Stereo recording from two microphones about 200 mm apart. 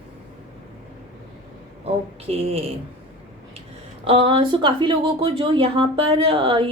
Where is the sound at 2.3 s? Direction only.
30° right (ahead or behind).